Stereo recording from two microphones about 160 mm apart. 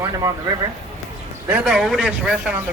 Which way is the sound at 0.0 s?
25° right (ahead or behind).